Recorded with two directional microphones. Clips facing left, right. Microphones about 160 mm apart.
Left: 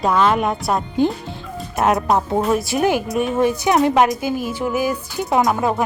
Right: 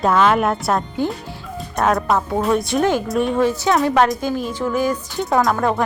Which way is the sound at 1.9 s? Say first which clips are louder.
Left 2 dB; 20° left (ahead or behind).